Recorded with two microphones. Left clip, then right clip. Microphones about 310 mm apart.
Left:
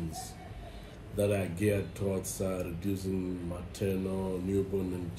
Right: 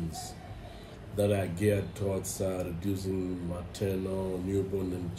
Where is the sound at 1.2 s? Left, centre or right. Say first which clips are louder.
Right 1 dB; centre.